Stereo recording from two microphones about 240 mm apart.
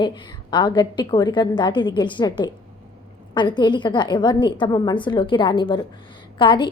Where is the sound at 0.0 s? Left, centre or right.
Centre.